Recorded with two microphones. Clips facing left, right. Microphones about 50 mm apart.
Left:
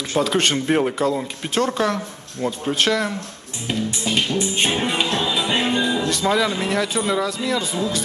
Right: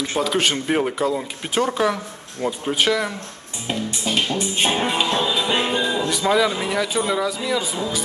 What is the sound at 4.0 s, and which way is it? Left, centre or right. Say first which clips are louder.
Music: even; centre.